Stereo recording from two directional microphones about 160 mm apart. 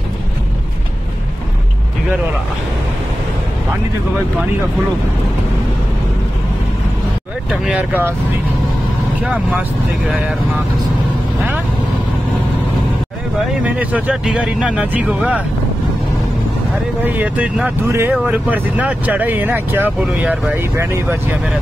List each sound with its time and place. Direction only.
7.6 s speech: 10° right (ahead or behind)
9.2 s speech: 5° right (ahead or behind)
13.4 s speech: 10° right (ahead or behind)
17.0 s speech: 10° right (ahead or behind)